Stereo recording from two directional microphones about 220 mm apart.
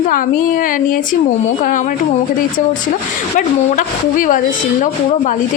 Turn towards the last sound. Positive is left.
turn(degrees=35)  # may be behind; listen again after turning